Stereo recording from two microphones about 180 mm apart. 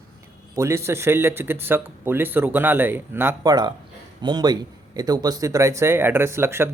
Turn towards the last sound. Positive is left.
turn(degrees=-15)  # may be behind; listen again after turning